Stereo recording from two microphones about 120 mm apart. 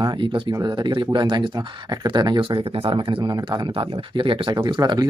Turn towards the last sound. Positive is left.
turn(degrees=-35)  # may be behind; listen again after turning